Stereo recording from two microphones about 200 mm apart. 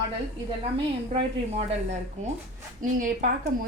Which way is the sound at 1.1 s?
30° right (ahead or behind).